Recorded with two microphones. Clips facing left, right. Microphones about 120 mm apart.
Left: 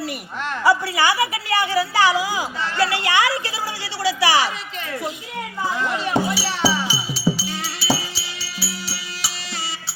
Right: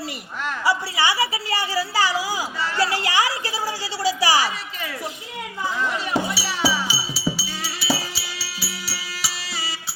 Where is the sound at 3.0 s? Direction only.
35° right (ahead or behind).